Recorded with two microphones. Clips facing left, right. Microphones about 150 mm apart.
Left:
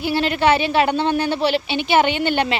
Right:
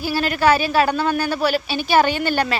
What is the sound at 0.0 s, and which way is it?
A woman's voice, 25° left (ahead or behind).